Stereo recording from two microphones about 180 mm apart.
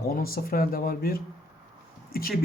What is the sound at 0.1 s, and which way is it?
Speech, 55° left (ahead or behind).